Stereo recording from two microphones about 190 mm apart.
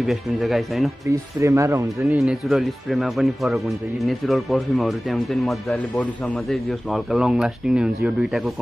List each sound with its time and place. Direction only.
0.0 s speech: centre (ahead or behind)
1.0 s speech: 15° right (ahead or behind)
2.1 s speech: centre (ahead or behind)